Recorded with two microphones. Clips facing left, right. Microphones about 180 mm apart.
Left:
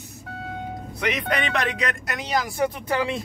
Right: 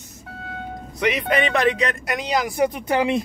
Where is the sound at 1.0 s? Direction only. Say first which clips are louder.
Right 5 dB; 5° right (ahead or behind).